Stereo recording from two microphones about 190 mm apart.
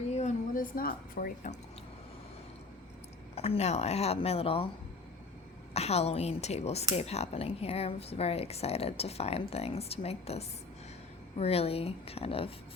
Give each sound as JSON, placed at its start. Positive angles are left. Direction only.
{"t": 0.1, "sound": "a sound", "side_deg": 40}
{"t": 3.3, "sound": "a woman's voice", "side_deg": 30}
{"t": 5.7, "sound": "a woman's voice", "side_deg": 35}